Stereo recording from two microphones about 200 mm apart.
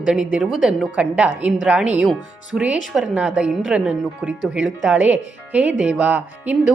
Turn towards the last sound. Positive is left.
turn(degrees=-5)  # may be behind; listen again after turning